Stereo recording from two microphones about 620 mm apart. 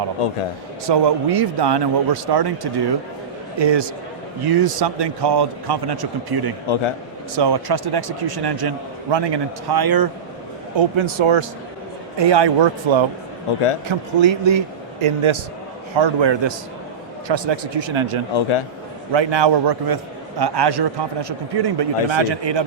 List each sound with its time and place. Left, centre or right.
0.9 s a man's voice: right
10.8 s a man's voice: right
18.3 s a man's voice: left
19.1 s a man's voice: right